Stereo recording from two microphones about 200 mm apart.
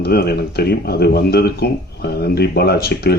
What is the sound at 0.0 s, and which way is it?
Speech, 50° left (ahead or behind).